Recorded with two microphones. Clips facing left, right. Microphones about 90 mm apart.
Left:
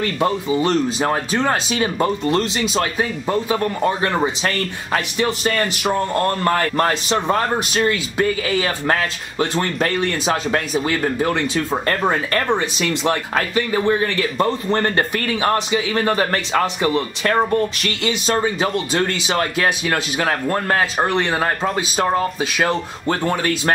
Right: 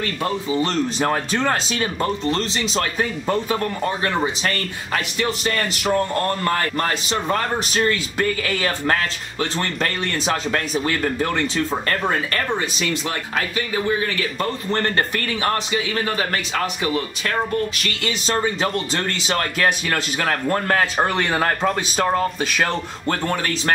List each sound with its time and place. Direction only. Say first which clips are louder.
0.2 s speech: left 3 dB; 10° left (ahead or behind)
4.1 s a man's voice: left 2 dB; 25° left (ahead or behind)
6.4 s speech: left 4 dB; 30° left (ahead or behind)
7.5 s speech: left 2 dB; 10° left (ahead or behind)
8.8 s a man's voice: left 1 dB; 25° left (ahead or behind)
9.9 s a man's voice: left 3 dB; 10° left (ahead or behind)
13.1 s speech: left 5 dB; 40° left (ahead or behind)
14.4 s a man's voice: left 4 dB; 20° left (ahead or behind)
16.2 s speech: left 4 dB; 40° left (ahead or behind)
16.9 s a man's voice: left 5 dB; 30° left (ahead or behind); by 21.1 s 10° left (ahead or behind)
21.1 s speech: left 1 dB; centre (ahead or behind)